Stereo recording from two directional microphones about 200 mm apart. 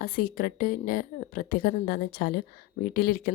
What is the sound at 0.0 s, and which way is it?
A woman's voice, 45° left (ahead or behind).